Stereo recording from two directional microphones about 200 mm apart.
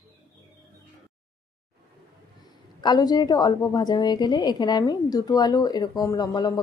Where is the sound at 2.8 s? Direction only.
20° left (ahead or behind).